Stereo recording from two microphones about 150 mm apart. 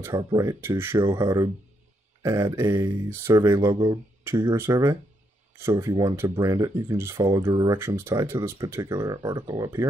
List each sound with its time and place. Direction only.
0.0 s speech: 25° right (ahead or behind)